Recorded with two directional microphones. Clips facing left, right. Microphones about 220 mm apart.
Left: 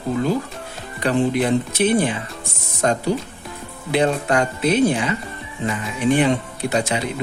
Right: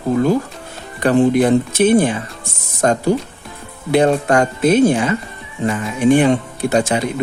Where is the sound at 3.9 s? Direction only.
45° right (ahead or behind).